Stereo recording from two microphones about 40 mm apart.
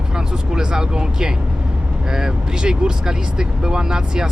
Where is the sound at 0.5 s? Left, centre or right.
Centre.